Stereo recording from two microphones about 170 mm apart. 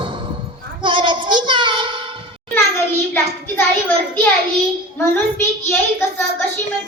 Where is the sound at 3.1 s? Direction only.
10° left (ahead or behind).